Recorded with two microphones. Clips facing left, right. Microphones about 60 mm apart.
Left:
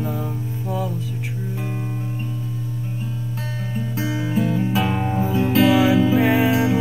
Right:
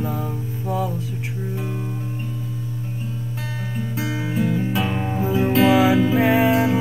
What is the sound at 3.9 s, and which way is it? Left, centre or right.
Music, centre.